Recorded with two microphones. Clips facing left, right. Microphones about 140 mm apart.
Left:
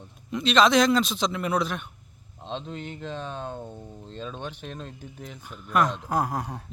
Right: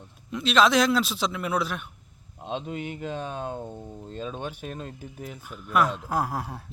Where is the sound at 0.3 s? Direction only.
5° right (ahead or behind).